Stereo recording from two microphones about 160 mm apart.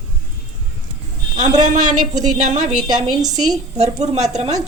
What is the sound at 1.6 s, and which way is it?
A woman's voice, 50° right (ahead or behind).